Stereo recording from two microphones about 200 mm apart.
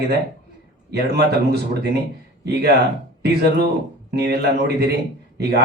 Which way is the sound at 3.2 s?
55° right (ahead or behind).